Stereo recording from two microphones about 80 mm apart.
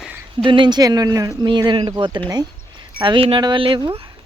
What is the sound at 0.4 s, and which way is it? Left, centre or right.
Speech, right.